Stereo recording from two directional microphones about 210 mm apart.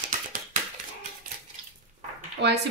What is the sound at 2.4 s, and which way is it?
Speech, 55° right (ahead or behind).